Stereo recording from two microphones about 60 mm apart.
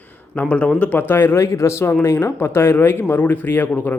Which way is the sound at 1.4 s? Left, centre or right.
Left.